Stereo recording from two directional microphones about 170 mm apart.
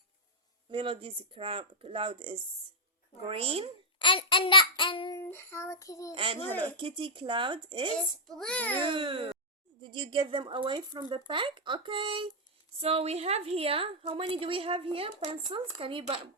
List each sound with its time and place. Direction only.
0.7 s a woman's voice: 30° right (ahead or behind)
3.9 s a child's voice: 30° left (ahead or behind)
5.1 s child singing: 15° left (ahead or behind)
6.1 s a woman's voice: 35° right (ahead or behind)
7.9 s a child's voice: 5° left (ahead or behind)
8.9 s a woman's voice: 30° right (ahead or behind)